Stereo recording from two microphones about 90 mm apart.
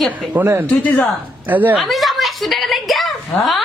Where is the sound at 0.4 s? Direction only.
30° right (ahead or behind).